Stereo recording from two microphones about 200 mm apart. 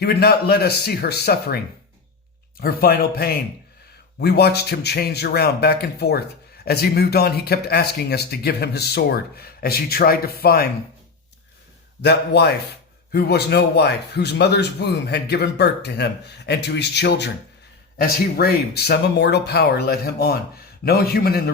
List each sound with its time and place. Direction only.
0.0 s speech: 55° left (ahead or behind)
2.6 s speech: 50° left (ahead or behind)
12.0 s a man's voice: 55° left (ahead or behind)